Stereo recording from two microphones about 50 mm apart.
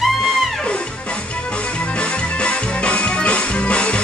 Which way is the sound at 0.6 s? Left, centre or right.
Left.